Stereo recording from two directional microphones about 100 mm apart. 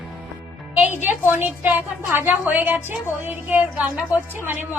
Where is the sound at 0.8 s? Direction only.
15° right (ahead or behind).